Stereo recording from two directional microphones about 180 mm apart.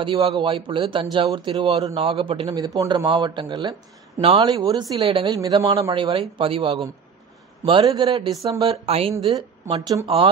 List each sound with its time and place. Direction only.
0.0 s a man's voice: 30° right (ahead or behind)
5.0 s speech: 30° right (ahead or behind)
5.3 s a man's voice: 20° right (ahead or behind)
8.6 s speech: 35° right (ahead or behind)
9.3 s a woman's voice: 20° right (ahead or behind)
10.0 s speech: 30° right (ahead or behind)